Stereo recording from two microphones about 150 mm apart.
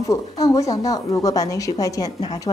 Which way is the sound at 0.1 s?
20° left (ahead or behind).